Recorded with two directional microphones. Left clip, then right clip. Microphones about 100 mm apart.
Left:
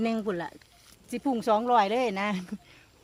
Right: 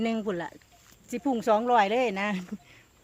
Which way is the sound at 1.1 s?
5° right (ahead or behind).